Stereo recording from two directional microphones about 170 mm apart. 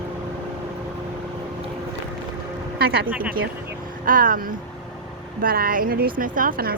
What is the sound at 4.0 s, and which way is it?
Speech, 55° right (ahead or behind).